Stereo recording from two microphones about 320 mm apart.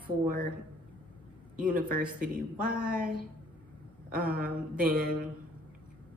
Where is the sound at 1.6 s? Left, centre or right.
Right.